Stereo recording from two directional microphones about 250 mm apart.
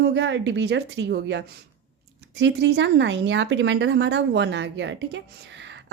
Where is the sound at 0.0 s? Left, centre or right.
Right.